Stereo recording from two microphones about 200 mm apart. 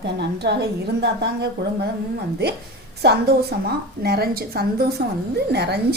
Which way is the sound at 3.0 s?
55° right (ahead or behind).